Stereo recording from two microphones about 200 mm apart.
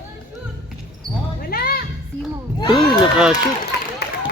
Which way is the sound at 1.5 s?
50° left (ahead or behind).